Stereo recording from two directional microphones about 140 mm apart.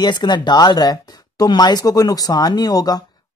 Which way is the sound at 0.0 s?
30° left (ahead or behind).